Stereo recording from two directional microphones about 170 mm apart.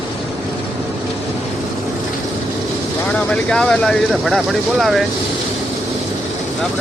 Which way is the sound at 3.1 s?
5° left (ahead or behind).